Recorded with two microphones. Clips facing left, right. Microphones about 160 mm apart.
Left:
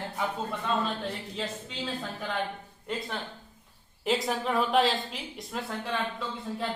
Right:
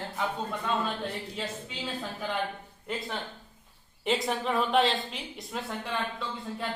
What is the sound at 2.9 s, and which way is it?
A woman's voice, centre (ahead or behind).